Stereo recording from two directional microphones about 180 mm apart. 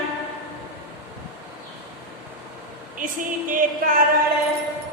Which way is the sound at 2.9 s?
50° right (ahead or behind).